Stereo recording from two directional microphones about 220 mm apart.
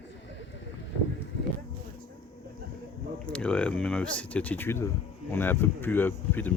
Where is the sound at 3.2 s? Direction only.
5° left (ahead or behind).